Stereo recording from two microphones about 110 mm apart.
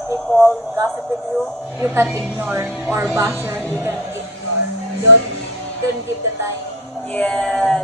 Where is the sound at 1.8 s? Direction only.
20° right (ahead or behind).